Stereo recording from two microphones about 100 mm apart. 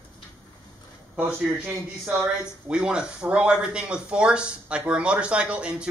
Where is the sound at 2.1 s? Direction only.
5° right (ahead or behind).